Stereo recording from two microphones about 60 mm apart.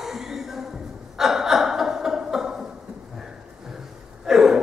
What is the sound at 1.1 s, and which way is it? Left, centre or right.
Gasp, centre.